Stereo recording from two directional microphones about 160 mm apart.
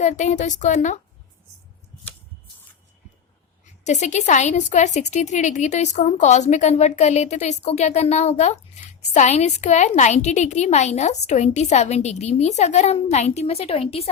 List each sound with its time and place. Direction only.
0.0 s a woman's voice: 45° left (ahead or behind)
3.8 s a woman's voice: 45° left (ahead or behind)